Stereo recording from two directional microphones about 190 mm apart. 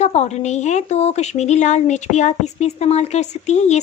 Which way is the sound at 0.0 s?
35° left (ahead or behind).